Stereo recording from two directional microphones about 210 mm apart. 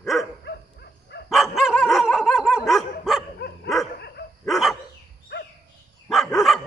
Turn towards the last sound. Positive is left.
turn(degrees=0)  # may be behind; listen again after turning